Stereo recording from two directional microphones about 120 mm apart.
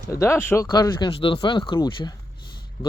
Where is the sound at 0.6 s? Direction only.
35° left (ahead or behind).